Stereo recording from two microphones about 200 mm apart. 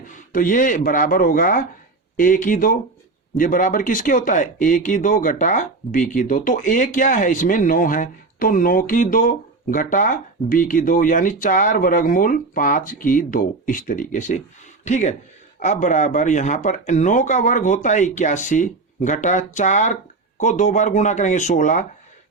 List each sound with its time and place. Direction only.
0.1 s speech: 40° left (ahead or behind)